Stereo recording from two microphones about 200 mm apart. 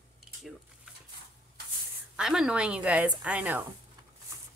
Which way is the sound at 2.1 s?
Centre (ahead or behind).